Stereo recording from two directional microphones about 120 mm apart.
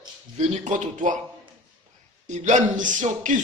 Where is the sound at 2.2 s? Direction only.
80° right.